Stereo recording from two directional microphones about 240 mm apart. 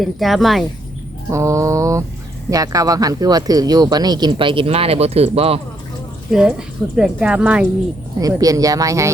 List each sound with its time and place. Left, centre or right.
0.0 s speech: centre
1.3 s speech: centre
6.3 s speech: centre